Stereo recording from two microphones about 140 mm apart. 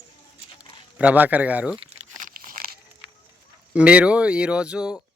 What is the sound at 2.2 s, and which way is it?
Crumpling, 75° right (ahead or behind).